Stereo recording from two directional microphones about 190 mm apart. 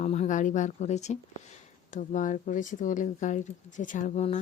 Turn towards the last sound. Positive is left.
turn(degrees=40)  # may be behind; listen again after turning